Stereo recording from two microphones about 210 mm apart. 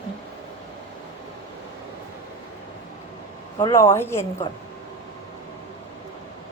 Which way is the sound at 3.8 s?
10° left (ahead or behind).